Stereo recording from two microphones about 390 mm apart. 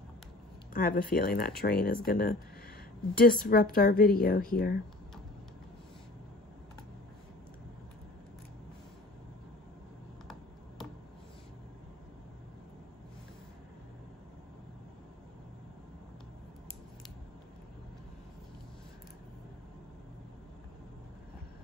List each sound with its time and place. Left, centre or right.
0.7 s speech: left